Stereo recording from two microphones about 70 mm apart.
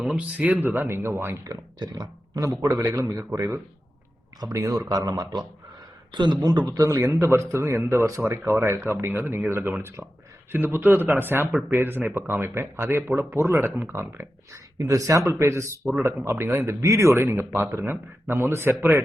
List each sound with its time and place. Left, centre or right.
0.2 s speech: right
1.8 s a man's voice: right
4.4 s speech: right
6.1 s a man's voice: right
6.7 s a man's voice: right
7.1 s a man's voice: right
14.5 s a man's voice: right